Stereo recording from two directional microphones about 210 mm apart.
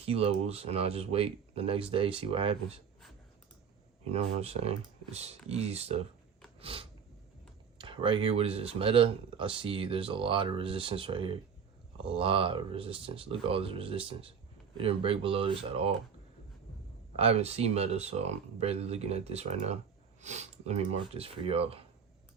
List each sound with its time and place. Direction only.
0.0 s speech: 30° right (ahead or behind)
4.1 s speech: 30° right (ahead or behind)
6.6 s a sound: 25° right (ahead or behind)
7.8 s speech: 25° right (ahead or behind)
17.2 s speech: 30° right (ahead or behind)